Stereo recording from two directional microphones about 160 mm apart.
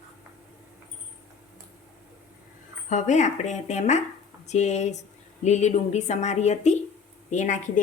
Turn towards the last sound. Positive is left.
turn(degrees=50)  # may be behind; listen again after turning